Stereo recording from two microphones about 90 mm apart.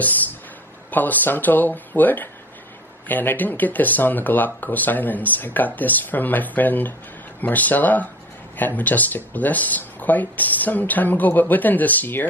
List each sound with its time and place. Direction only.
0.9 s speech: 20° left (ahead or behind)